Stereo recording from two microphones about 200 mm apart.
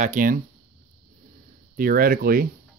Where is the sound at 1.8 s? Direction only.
45° right (ahead or behind).